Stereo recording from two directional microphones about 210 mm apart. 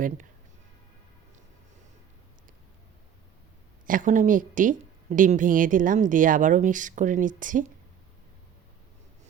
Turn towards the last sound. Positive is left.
turn(degrees=-40)  # may be behind; listen again after turning